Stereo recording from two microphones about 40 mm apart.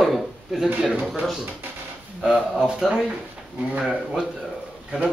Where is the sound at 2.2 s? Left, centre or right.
Centre.